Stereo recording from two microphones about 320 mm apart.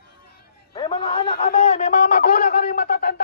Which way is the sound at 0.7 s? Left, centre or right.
Centre.